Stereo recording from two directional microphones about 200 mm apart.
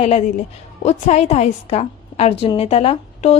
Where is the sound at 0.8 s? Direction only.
30° left (ahead or behind).